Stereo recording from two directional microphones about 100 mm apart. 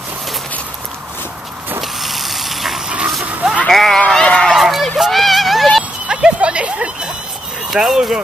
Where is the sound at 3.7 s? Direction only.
5° left (ahead or behind).